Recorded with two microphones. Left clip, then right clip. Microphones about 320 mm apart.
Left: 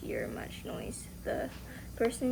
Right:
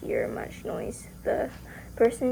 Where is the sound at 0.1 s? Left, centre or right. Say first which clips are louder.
Right 9 dB; centre.